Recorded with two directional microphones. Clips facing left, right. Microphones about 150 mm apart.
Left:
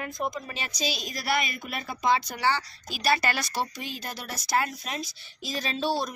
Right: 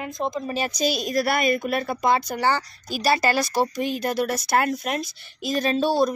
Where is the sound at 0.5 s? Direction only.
45° right (ahead or behind).